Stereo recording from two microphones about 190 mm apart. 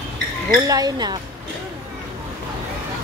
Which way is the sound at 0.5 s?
20° right (ahead or behind).